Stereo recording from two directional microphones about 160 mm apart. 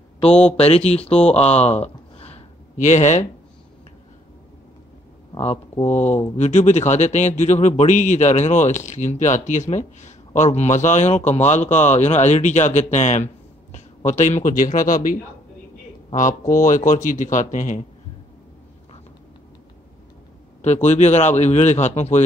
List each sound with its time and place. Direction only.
0.6 s speech: 40° left (ahead or behind)
1.3 s a sound: 40° left (ahead or behind)
5.8 s speech: 10° left (ahead or behind)
6.3 s speech: 45° left (ahead or behind)
16.2 s speech: 55° left (ahead or behind)
20.6 s speech: 45° left (ahead or behind)